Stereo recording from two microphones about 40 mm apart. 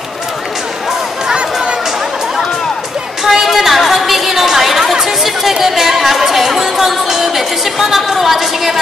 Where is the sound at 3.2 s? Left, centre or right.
Centre.